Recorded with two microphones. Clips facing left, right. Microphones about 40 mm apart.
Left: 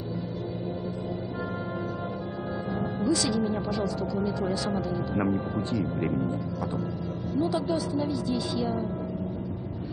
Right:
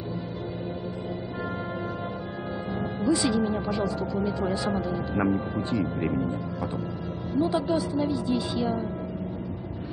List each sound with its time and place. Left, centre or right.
3.1 s a woman's voice: right
4.8 s a woman's voice: centre